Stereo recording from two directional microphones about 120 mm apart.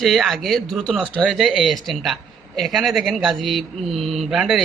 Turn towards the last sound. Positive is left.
turn(degrees=0)  # may be behind; listen again after turning